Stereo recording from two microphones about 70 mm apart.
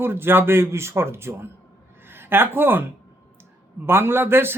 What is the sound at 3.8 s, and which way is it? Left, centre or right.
Speech, right.